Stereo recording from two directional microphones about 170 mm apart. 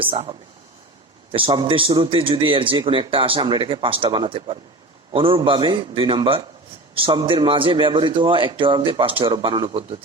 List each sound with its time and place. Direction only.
0.0 s a man's voice: 30° right (ahead or behind)